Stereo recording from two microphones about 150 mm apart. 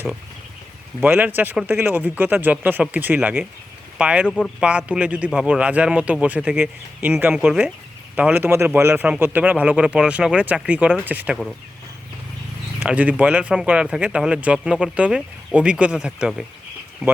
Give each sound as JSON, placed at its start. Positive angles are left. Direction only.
{"t": 1.0, "sound": "speech", "side_deg": -10}
{"t": 4.3, "sound": "speech", "side_deg": 5}
{"t": 4.9, "sound": "speech", "side_deg": -10}
{"t": 12.8, "sound": "speech", "side_deg": -10}